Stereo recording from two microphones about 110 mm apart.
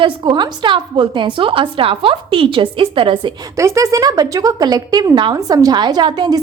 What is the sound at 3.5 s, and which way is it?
A woman's voice, 30° right (ahead or behind).